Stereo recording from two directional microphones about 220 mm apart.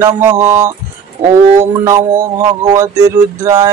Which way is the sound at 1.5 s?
15° right (ahead or behind).